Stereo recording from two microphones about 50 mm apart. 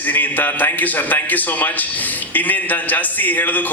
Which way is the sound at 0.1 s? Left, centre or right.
Left.